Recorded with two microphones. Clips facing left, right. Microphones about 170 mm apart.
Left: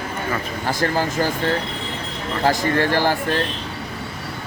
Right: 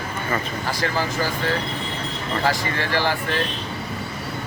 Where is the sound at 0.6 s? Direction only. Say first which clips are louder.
Left 7 dB; 50° left (ahead or behind).